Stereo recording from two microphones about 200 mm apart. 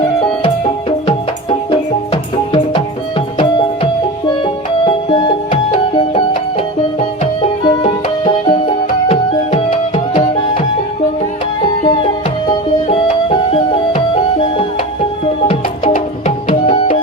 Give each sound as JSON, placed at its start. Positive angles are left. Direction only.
{"t": 0.2, "sound": "music", "side_deg": 30}
{"t": 4.4, "sound": "music", "side_deg": 25}
{"t": 7.6, "sound": "music", "side_deg": 25}
{"t": 10.2, "sound": "music", "side_deg": 40}
{"t": 11.9, "sound": "music", "side_deg": 25}
{"t": 15.9, "sound": "tabla", "side_deg": 40}